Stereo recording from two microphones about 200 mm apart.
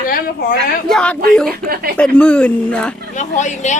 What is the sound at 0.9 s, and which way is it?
A woman's voice, 5° left (ahead or behind).